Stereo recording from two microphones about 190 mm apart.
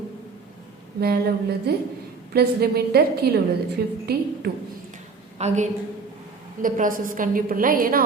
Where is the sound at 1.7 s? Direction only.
55° right (ahead or behind).